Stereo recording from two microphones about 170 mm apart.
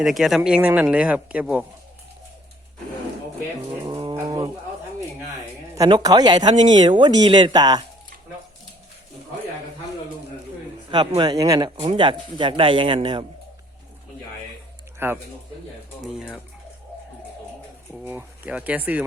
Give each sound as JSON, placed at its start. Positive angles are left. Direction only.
{"t": 0.0, "sound": "speech", "side_deg": 0}
{"t": 3.8, "sound": "bird", "side_deg": -25}
{"t": 5.7, "sound": "speech", "side_deg": -20}
{"t": 10.9, "sound": "speech", "side_deg": -25}
{"t": 14.9, "sound": "speech", "side_deg": -15}
{"t": 18.0, "sound": "speech", "side_deg": -10}